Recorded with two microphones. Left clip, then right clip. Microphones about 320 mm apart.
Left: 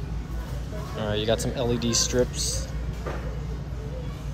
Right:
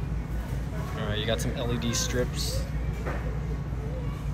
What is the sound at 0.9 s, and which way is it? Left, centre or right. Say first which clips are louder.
Speech: left 5 dB; centre.